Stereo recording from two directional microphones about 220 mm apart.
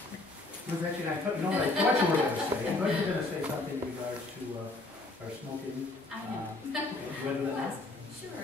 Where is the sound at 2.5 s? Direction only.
15° right (ahead or behind).